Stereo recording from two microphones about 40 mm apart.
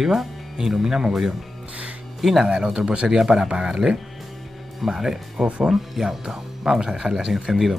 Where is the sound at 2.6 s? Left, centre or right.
Right.